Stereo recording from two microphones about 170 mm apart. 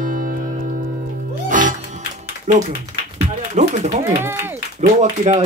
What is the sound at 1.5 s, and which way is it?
Music, 50° right (ahead or behind).